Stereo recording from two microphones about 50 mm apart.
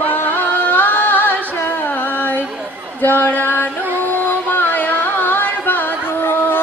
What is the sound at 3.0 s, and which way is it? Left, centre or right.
Speech, left.